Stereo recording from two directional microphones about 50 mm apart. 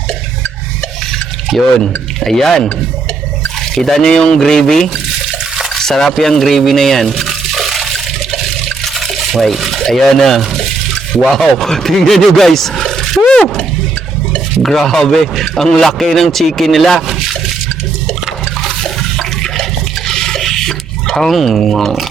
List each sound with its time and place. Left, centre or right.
1.5 s speech: centre
3.8 s speech: centre
5.2 s water: centre
5.7 s a sound: centre
9.8 s speech: centre
13.2 s roar: centre
14.6 s speech: centre
20.1 s a sound: centre